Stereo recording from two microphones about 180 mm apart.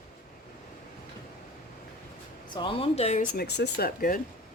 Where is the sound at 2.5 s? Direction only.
30° left (ahead or behind).